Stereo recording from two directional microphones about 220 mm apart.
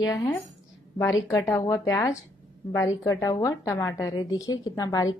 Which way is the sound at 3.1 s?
15° left (ahead or behind).